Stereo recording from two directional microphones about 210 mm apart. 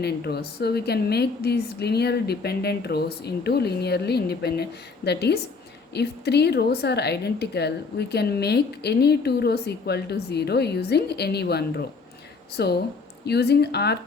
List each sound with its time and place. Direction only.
0.0 s a woman's voice: 50° left (ahead or behind)